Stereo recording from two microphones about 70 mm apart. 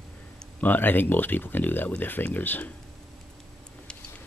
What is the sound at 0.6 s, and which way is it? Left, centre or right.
Speech, left.